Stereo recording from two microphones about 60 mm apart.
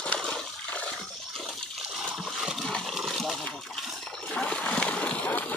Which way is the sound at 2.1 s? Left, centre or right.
Centre.